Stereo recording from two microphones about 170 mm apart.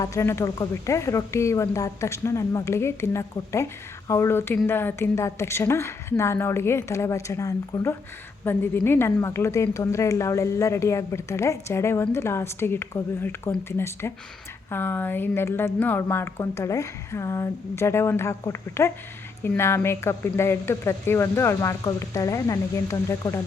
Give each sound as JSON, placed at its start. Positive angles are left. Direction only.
{"t": 0.0, "sound": "speech", "side_deg": 15}